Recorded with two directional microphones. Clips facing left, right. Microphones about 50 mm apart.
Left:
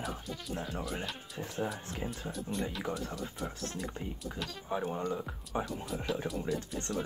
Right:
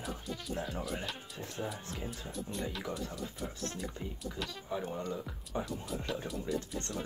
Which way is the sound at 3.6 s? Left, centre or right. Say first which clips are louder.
Right 2 dB; centre.